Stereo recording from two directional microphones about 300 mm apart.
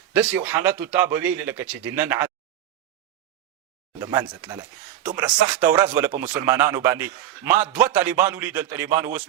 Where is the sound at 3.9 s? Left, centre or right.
Centre.